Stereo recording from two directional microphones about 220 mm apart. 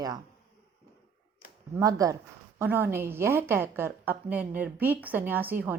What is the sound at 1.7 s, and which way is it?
A woman's voice, 15° right (ahead or behind).